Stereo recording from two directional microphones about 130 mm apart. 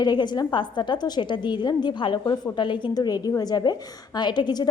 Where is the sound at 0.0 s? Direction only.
35° left (ahead or behind).